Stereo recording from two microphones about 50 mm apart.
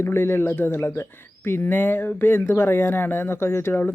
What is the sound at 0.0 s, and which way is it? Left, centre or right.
Speech, left.